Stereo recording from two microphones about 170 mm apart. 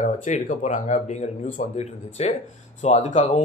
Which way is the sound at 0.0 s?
50° left (ahead or behind).